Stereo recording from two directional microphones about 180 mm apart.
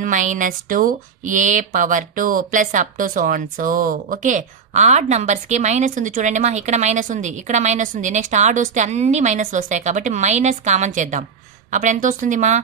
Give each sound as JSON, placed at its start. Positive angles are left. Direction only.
{"t": 0.0, "sound": "speech", "side_deg": -45}